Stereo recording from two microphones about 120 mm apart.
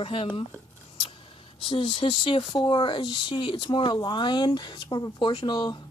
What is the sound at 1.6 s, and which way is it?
Speech, 50° left (ahead or behind).